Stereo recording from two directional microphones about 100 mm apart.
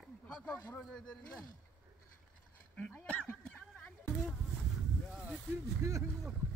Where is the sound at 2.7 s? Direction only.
10° left (ahead or behind).